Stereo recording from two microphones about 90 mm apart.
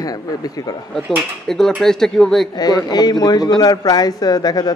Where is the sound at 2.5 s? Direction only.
50° left (ahead or behind).